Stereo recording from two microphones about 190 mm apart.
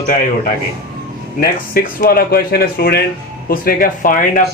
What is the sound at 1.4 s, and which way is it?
Speech, 50° left (ahead or behind).